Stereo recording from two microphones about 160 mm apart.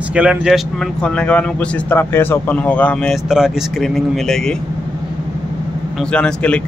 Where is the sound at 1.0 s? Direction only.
5° left (ahead or behind).